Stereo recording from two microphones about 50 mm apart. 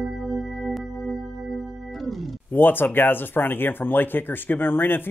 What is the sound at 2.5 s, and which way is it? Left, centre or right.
Speech, left.